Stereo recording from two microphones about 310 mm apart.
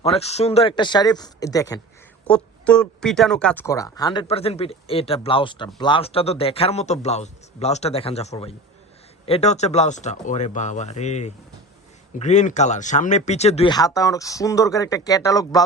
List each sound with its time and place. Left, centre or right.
0.0 s a man's voice: centre